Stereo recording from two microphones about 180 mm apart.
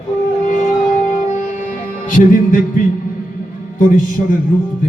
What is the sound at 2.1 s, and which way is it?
A man's voice, 50° left (ahead or behind).